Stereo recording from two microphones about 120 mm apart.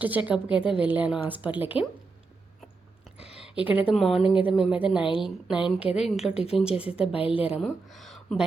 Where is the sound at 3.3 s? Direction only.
10° right (ahead or behind).